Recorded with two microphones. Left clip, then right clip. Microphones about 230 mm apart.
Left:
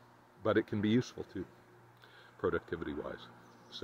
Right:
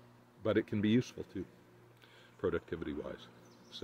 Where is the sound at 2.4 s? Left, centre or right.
Right.